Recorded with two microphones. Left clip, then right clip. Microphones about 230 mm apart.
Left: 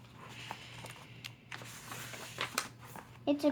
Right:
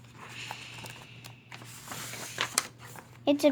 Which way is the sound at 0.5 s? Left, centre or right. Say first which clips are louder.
Right 2 dB; centre.